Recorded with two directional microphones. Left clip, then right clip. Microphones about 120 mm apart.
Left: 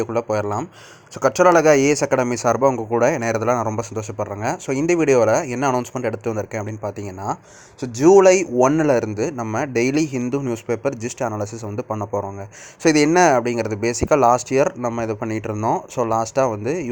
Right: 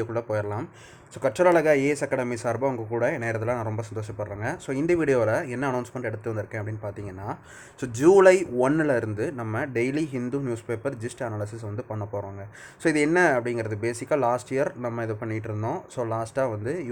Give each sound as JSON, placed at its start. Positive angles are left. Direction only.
{"t": 0.0, "sound": "a man's voice", "side_deg": 30}
{"t": 7.8, "sound": "a man's voice", "side_deg": 20}